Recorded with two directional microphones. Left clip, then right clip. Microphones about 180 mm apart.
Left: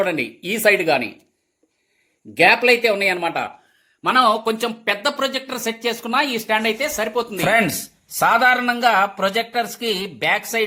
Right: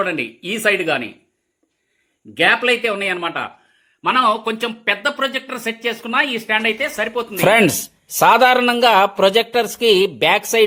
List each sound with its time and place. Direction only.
0.0 s speech: 5° left (ahead or behind)
2.3 s speech: centre (ahead or behind)
7.4 s speech: 55° right (ahead or behind)